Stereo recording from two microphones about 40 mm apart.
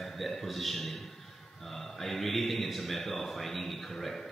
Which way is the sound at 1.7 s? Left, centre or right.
Centre.